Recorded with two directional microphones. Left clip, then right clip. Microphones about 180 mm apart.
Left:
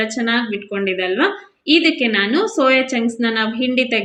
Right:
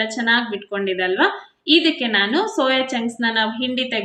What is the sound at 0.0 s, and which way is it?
A woman's voice, 10° left (ahead or behind).